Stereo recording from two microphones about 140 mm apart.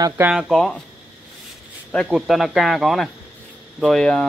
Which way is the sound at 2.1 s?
Centre (ahead or behind).